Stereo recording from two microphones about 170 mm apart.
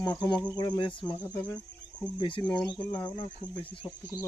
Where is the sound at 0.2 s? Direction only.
25° left (ahead or behind).